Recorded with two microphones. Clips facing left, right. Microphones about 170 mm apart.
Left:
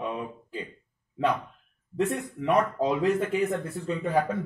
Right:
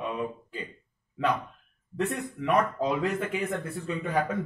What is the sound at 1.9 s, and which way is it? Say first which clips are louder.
Speech: left 2 dB; 15° left (ahead or behind).